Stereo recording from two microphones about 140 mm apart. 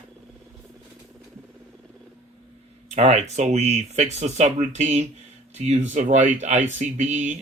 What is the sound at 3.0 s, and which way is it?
Speech, 55° right (ahead or behind).